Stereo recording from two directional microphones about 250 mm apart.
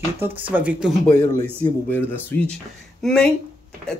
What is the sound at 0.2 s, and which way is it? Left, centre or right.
Speech, centre.